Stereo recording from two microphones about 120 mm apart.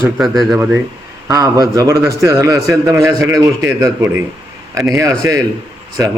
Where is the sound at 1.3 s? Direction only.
30° right (ahead or behind).